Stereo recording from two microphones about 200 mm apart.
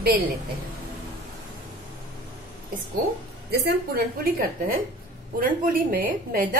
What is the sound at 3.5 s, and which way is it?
Speech, 50° right (ahead or behind).